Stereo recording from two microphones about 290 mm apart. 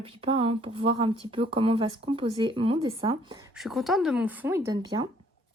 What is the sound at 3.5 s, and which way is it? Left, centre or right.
Speech, centre.